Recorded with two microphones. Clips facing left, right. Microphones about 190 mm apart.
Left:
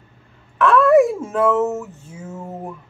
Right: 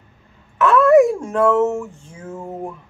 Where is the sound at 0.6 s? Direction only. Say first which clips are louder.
Right 1 dB; centre (ahead or behind).